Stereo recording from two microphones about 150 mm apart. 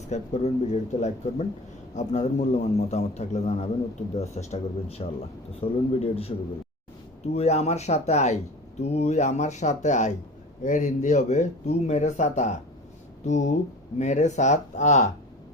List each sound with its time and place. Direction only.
0.1 s a man's voice: 50° left (ahead or behind)
7.3 s speech: 45° left (ahead or behind)